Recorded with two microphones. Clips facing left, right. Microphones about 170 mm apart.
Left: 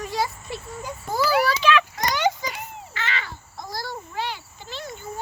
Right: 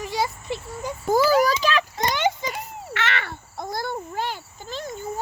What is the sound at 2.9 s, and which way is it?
Babbling, 70° right (ahead or behind).